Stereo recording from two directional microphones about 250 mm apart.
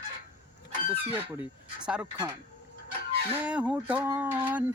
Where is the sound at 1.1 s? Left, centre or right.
Centre.